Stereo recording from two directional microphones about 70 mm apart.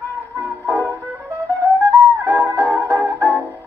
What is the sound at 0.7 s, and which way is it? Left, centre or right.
Music, right.